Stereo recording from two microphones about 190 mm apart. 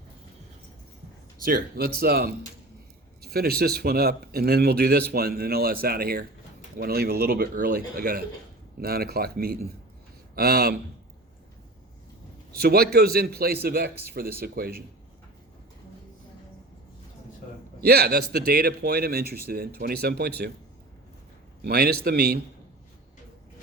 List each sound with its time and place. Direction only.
1.5 s speech: 50° right (ahead or behind)
12.5 s speech: 55° right (ahead or behind)
17.8 s speech: 55° right (ahead or behind)
21.6 s speech: 55° right (ahead or behind)